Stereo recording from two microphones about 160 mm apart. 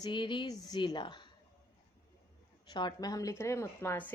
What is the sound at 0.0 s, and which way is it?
A woman's voice, 30° left (ahead or behind).